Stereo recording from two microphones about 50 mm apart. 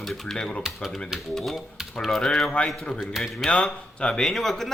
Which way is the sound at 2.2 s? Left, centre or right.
Centre.